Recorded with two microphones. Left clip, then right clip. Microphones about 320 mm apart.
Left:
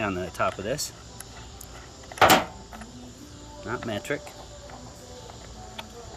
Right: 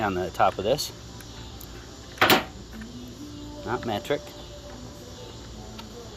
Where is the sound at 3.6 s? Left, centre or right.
Left.